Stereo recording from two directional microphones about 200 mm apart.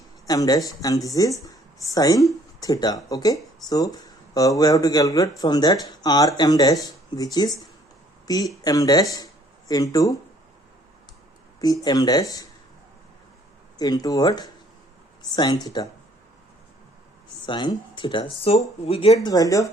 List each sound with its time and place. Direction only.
0.3 s speech: 20° left (ahead or behind)
11.6 s speech: 20° left (ahead or behind)
13.7 s speech: 20° left (ahead or behind)
17.4 s speech: 25° left (ahead or behind)
19.3 s speech: 15° left (ahead or behind)